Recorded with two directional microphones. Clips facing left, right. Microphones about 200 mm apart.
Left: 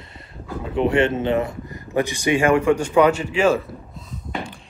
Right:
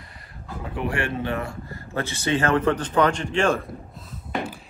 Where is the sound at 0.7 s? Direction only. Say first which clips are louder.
Left 9 dB; 20° left (ahead or behind); by 3.6 s 5° left (ahead or behind).